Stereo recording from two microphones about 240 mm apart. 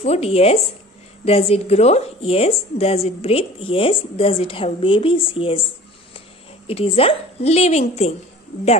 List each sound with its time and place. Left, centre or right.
0.0 s a woman's voice: left
6.7 s a woman's voice: left